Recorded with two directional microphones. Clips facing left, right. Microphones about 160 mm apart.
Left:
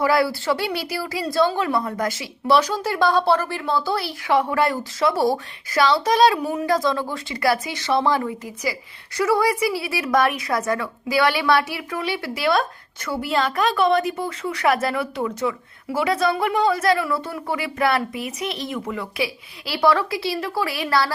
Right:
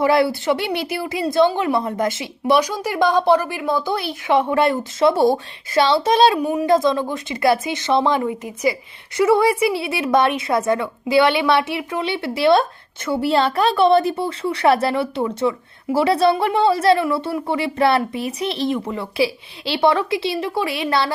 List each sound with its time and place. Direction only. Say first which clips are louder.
0.0 s a woman's voice: right 3 dB; 25° right (ahead or behind)